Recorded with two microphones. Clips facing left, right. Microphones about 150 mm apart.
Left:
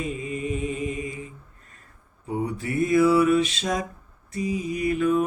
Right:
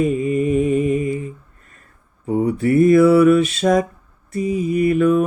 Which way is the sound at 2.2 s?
60° right (ahead or behind).